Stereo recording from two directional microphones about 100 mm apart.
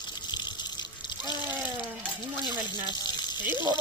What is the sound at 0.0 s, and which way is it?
Water, 45° left (ahead or behind).